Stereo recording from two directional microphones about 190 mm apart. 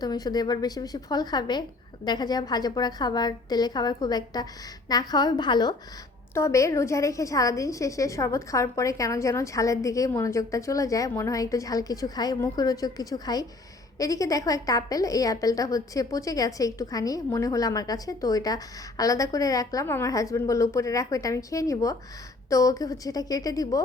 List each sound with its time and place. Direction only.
0.0 s a woman's voice: 20° left (ahead or behind)